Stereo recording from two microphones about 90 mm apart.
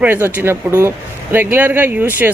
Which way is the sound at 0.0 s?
20° right (ahead or behind).